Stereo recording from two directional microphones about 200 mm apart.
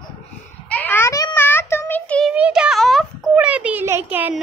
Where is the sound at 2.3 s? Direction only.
5° right (ahead or behind).